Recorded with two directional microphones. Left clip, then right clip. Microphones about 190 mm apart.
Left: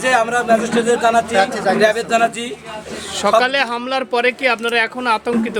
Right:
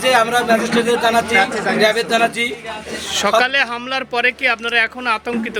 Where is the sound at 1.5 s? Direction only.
50° left (ahead or behind).